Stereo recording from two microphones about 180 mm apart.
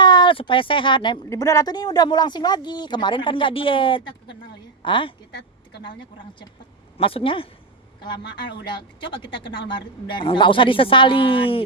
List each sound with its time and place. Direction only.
0.0 s speech: 25° left (ahead or behind)
7.0 s speech: 30° left (ahead or behind)